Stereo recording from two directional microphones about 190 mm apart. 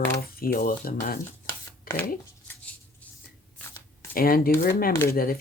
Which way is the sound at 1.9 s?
50° left (ahead or behind).